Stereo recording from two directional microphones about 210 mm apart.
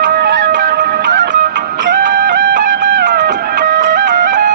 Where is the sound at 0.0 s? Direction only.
50° right (ahead or behind).